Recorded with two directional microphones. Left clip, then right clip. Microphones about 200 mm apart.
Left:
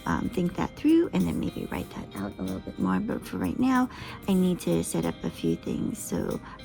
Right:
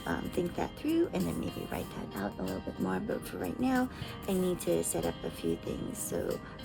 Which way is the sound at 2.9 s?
15° left (ahead or behind).